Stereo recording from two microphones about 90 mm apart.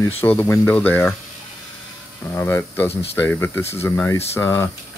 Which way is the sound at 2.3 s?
25° left (ahead or behind).